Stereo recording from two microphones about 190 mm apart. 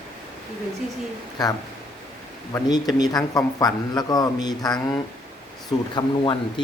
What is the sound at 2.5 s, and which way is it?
Speech, 20° left (ahead or behind).